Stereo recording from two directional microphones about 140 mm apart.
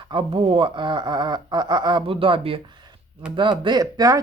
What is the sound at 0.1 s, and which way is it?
Speech, 40° right (ahead or behind).